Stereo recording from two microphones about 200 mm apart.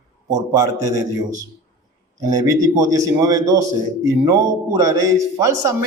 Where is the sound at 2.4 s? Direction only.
15° right (ahead or behind).